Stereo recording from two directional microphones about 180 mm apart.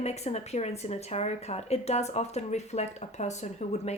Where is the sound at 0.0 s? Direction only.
35° left (ahead or behind).